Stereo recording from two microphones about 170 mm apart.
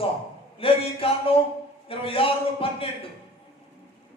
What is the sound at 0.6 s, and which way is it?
Music, 35° left (ahead or behind).